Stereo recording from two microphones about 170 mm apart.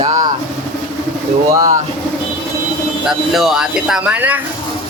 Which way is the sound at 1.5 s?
20° right (ahead or behind).